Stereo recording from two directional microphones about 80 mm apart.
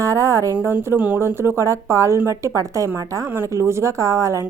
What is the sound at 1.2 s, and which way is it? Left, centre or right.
A woman's voice, right.